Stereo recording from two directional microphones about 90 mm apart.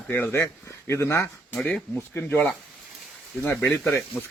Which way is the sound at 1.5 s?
10° left (ahead or behind).